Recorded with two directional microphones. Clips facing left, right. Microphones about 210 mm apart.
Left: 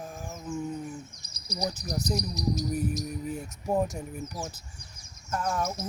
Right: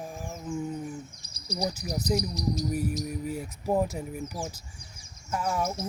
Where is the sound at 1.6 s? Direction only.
10° right (ahead or behind).